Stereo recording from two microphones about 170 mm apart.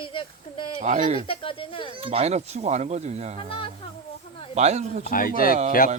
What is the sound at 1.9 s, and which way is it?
Speech, 35° right (ahead or behind).